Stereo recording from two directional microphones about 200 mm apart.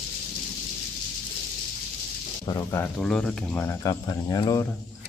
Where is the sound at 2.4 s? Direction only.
15° left (ahead or behind).